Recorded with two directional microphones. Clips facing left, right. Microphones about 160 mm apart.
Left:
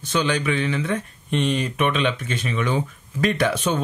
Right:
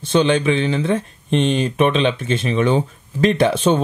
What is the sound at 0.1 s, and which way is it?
Speech, 25° right (ahead or behind).